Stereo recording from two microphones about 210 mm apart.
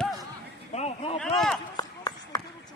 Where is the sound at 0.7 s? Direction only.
30° left (ahead or behind).